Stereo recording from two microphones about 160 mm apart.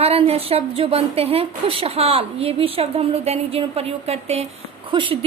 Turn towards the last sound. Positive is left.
turn(degrees=-30)  # may be behind; listen again after turning